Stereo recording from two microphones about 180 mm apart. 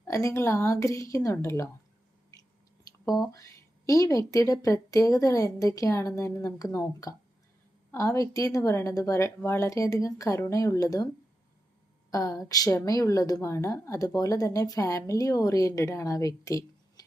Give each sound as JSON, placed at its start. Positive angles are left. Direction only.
{"t": 0.1, "sound": "a woman's voice", "side_deg": 15}
{"t": 3.1, "sound": "a woman's voice", "side_deg": 20}
{"t": 12.1, "sound": "a woman's voice", "side_deg": 20}